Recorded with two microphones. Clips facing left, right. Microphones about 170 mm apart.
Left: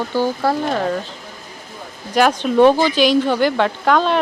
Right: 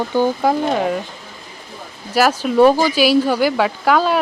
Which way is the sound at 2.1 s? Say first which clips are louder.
Even; 5° right (ahead or behind).